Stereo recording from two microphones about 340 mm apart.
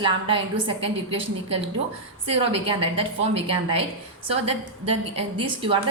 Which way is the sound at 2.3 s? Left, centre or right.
Centre.